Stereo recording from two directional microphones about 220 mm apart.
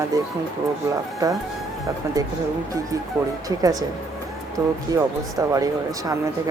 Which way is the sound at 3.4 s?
15° right (ahead or behind).